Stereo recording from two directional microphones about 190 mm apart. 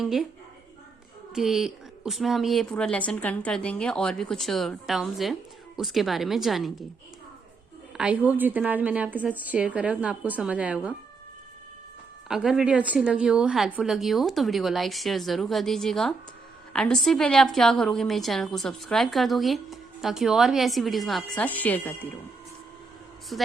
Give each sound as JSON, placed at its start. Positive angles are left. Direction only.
{"t": 0.0, "sound": "a woman's voice", "side_deg": 0}
{"t": 1.4, "sound": "a woman's voice", "side_deg": 0}
{"t": 7.9, "sound": "a woman's voice", "side_deg": -5}
{"t": 12.3, "sound": "a woman's voice", "side_deg": -5}
{"t": 23.3, "sound": "a woman's voice", "side_deg": 0}